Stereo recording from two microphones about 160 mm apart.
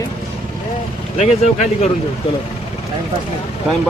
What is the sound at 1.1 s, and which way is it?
Speech, 45° left (ahead or behind).